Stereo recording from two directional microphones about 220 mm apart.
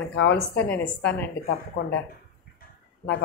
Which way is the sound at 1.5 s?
40° left (ahead or behind).